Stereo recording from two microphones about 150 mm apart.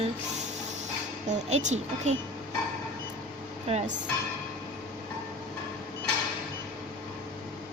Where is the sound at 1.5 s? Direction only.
50° right (ahead or behind).